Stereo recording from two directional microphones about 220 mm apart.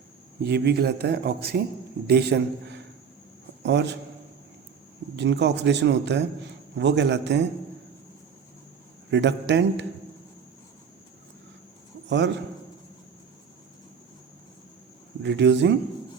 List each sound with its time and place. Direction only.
0.4 s a man's voice: 50° right (ahead or behind)
5.1 s speech: 50° right (ahead or behind)
9.0 s speech: 55° right (ahead or behind)
12.0 s a man's voice: 50° right (ahead or behind)
15.2 s speech: 50° right (ahead or behind)